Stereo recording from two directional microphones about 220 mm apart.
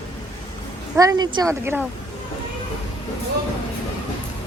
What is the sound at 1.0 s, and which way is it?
Speech, 15° right (ahead or behind).